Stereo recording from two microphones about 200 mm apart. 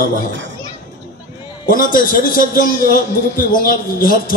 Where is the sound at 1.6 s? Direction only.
45° left (ahead or behind).